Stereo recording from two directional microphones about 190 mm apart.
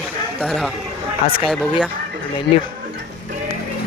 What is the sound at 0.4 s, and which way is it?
Speech, centre (ahead or behind).